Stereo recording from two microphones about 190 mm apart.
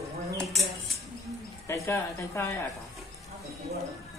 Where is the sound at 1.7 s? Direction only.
15° left (ahead or behind).